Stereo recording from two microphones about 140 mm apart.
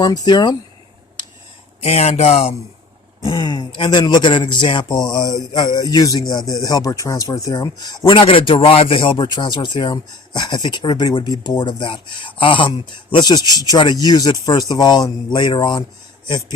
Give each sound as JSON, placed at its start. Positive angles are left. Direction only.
{"t": 0.0, "sound": "speech", "side_deg": 30}
{"t": 1.8, "sound": "speech", "side_deg": 50}
{"t": 3.2, "sound": "a man's voice", "side_deg": 35}